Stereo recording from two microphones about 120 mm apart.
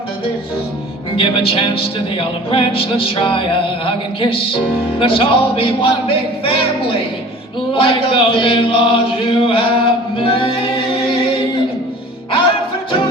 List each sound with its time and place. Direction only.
1.1 s speech: 50° left (ahead or behind)
7.7 s chant: 45° left (ahead or behind)